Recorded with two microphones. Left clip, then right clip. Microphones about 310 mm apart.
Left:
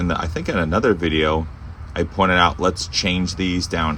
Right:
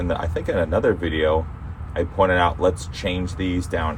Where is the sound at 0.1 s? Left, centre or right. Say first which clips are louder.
Right 1 dB; centre.